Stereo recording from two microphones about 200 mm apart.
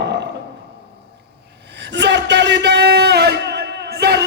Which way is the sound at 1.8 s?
60° right (ahead or behind).